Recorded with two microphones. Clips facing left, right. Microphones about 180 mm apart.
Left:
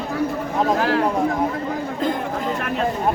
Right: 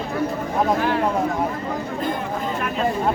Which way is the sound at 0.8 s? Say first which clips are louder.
Left 2 dB; 90° left.